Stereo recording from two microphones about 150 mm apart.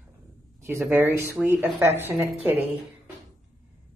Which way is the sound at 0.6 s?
15° right (ahead or behind).